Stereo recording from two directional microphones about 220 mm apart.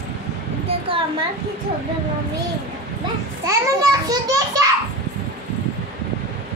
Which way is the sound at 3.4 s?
15° right (ahead or behind).